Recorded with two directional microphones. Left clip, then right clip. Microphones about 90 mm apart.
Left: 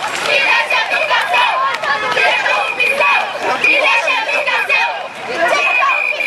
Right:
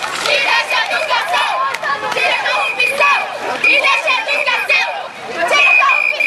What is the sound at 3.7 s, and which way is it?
Chatter, 20° right (ahead or behind).